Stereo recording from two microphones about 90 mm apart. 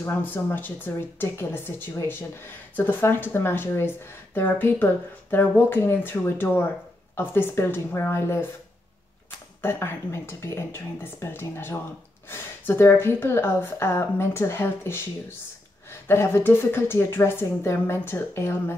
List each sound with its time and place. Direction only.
0.0 s speech: 20° left (ahead or behind)
9.6 s speech: 25° left (ahead or behind)